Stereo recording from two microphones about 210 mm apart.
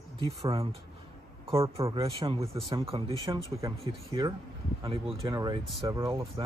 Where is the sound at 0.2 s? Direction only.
25° right (ahead or behind).